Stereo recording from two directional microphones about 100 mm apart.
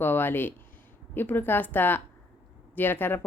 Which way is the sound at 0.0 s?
20° left (ahead or behind).